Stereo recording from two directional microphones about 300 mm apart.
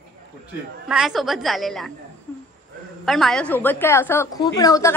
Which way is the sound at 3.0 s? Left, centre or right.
Centre.